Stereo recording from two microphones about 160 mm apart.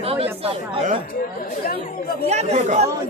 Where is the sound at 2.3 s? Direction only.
45° right (ahead or behind).